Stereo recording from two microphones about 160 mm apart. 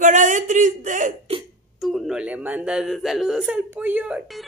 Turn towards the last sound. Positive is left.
turn(degrees=-10)  # may be behind; listen again after turning